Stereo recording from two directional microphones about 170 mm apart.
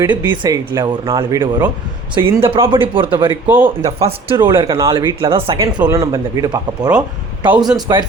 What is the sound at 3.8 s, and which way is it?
Speech, 35° right (ahead or behind).